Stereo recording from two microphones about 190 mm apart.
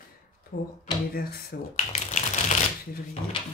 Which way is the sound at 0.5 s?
50° left (ahead or behind).